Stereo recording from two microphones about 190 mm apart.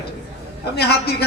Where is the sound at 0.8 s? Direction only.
60° left (ahead or behind).